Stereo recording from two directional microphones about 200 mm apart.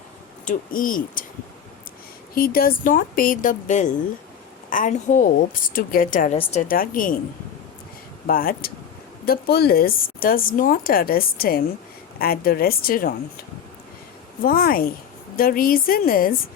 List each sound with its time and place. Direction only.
0.4 s speech: 45° left (ahead or behind)
2.3 s a woman's voice: 45° left (ahead or behind)
6.7 s speech: 45° left (ahead or behind)
8.3 s speech: 45° left (ahead or behind)
14.4 s speech: 45° left (ahead or behind)